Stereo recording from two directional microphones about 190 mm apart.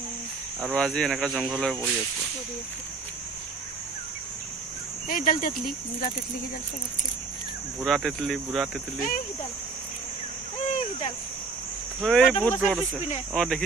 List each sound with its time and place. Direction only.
0.7 s speech: 5° left (ahead or behind)
5.0 s speech: 45° left (ahead or behind)
7.8 s speech: centre (ahead or behind)
10.7 s a sound: 30° left (ahead or behind)
12.0 s speech: centre (ahead or behind)